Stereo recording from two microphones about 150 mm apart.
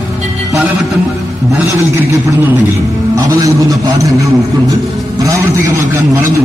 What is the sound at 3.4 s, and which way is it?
A man's voice, 20° right (ahead or behind).